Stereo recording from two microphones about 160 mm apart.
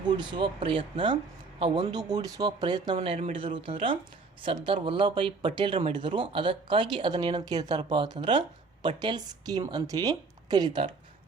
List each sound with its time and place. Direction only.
0.2 s speech: 30° right (ahead or behind)